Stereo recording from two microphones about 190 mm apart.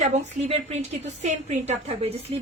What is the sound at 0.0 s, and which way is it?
A woman's voice, 35° right (ahead or behind).